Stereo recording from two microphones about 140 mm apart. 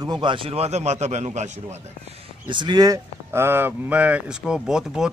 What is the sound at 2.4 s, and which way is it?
Speech, 35° right (ahead or behind).